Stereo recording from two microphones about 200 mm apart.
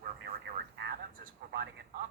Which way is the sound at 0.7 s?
50° right (ahead or behind).